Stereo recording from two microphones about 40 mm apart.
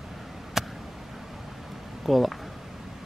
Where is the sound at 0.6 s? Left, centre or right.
Centre.